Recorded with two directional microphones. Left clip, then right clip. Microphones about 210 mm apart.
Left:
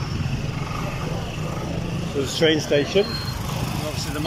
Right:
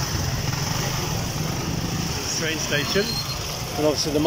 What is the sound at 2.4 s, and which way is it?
Speech, 30° left (ahead or behind).